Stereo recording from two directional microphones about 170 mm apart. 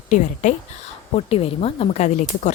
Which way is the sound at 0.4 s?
45° left (ahead or behind).